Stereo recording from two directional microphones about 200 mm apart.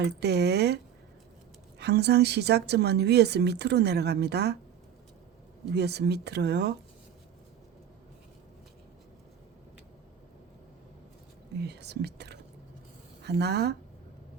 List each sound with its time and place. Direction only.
0.0 s a woman's voice: 55° right (ahead or behind)
1.8 s a woman's voice: 55° right (ahead or behind)
5.7 s a woman's voice: 55° right (ahead or behind)
11.6 s a woman's voice: 55° right (ahead or behind)